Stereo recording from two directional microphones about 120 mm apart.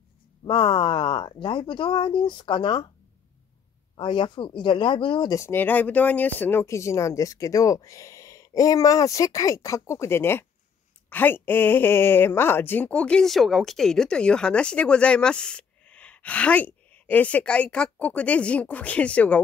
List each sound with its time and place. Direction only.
0.5 s speech: 45° left (ahead or behind)
3.9 s speech: 45° left (ahead or behind)
5.3 s speech: 20° left (ahead or behind)